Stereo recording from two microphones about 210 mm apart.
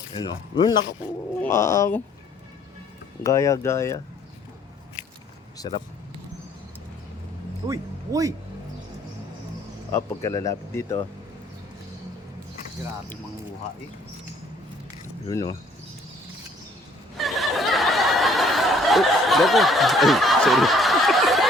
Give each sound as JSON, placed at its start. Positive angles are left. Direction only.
{"t": 0.1, "sound": "speech", "side_deg": 20}
{"t": 3.2, "sound": "speech", "side_deg": 15}
{"t": 5.5, "sound": "speech", "side_deg": 20}
{"t": 7.7, "sound": "speech", "side_deg": -15}
{"t": 9.9, "sound": "speech", "side_deg": 15}
{"t": 15.3, "sound": "speech", "side_deg": 15}
{"t": 17.2, "sound": "snicker", "side_deg": 0}